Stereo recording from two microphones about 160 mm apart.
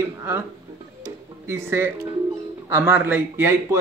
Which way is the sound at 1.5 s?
15° right (ahead or behind).